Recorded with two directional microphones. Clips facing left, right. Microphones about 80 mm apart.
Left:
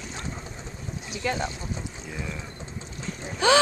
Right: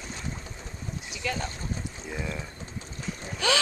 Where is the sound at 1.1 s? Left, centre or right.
Left.